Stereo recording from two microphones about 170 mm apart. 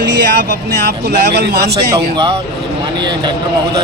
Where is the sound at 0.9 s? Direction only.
75° right (ahead or behind).